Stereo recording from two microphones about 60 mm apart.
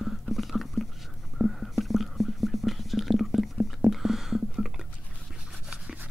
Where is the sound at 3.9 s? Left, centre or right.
Centre.